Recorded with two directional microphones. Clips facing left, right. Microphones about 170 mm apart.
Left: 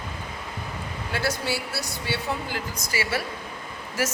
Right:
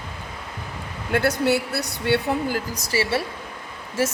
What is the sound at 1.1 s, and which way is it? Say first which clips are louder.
Speech: right 8 dB; 60° right (ahead or behind).